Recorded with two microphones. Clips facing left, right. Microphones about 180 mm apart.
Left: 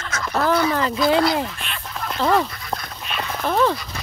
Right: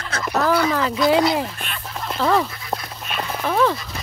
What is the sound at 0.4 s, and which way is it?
Speech, 5° right (ahead or behind).